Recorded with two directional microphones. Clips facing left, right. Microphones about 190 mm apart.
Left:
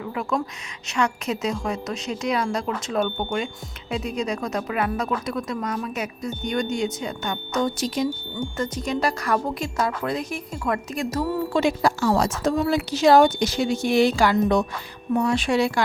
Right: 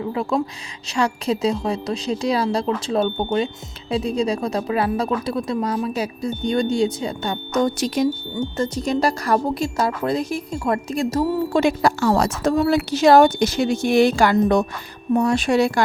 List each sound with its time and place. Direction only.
0.0 s speech: 30° right (ahead or behind)
7.6 s a woman's voice: 60° right (ahead or behind)
8.5 s speech: 30° right (ahead or behind)
11.5 s a woman's voice: 60° right (ahead or behind); by 15.8 s 45° right (ahead or behind)